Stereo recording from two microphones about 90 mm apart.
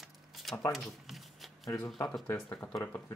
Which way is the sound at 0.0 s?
Centre (ahead or behind).